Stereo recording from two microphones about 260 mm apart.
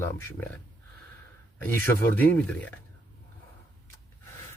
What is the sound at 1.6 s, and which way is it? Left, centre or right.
Speech, centre.